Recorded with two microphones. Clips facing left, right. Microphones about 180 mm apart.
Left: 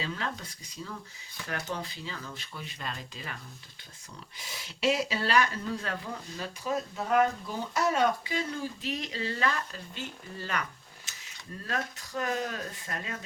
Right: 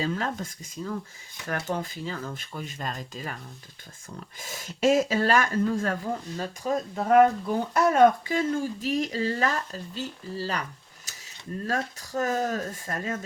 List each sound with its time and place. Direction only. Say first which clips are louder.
0.0 s speech: right 7 dB; 45° right (ahead or behind)
4.4 s speech: right 7 dB; 45° right (ahead or behind)
11.1 s a sound: right 4 dB; 40° right (ahead or behind)
11.6 s speech: right 5 dB; 40° right (ahead or behind)